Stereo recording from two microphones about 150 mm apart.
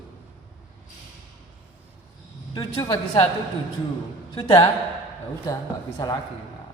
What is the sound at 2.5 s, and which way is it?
Speech, 30° left (ahead or behind).